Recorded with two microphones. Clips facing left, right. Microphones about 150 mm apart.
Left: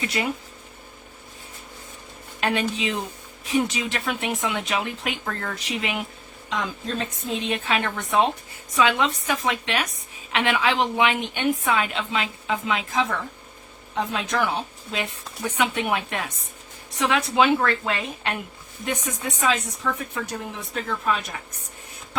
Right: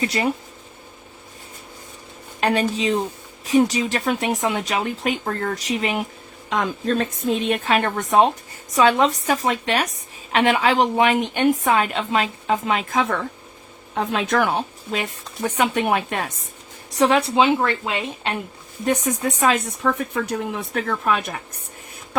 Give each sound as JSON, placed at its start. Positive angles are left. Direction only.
{"t": 0.0, "sound": "speech", "side_deg": -35}
{"t": 2.4, "sound": "speech", "side_deg": -40}
{"t": 6.5, "sound": "a woman's voice", "side_deg": -55}
{"t": 17.0, "sound": "a woman's voice", "side_deg": -35}
{"t": 18.9, "sound": "speech", "side_deg": -45}